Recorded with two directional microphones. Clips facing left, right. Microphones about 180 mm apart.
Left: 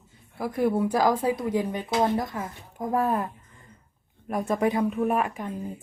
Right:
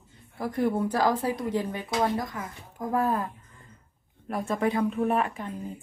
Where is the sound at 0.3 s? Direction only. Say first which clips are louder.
Left 2 dB; 10° left (ahead or behind).